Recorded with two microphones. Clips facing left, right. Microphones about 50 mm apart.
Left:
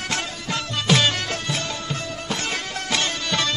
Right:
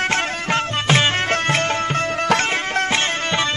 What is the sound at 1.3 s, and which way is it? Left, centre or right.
Music, right.